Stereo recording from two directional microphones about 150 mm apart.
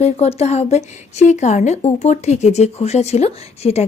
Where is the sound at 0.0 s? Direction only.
45° left (ahead or behind).